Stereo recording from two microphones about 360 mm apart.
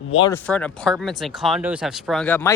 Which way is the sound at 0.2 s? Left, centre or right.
Centre.